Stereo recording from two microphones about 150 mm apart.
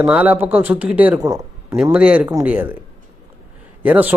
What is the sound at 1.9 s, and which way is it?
Speech, 5° right (ahead or behind).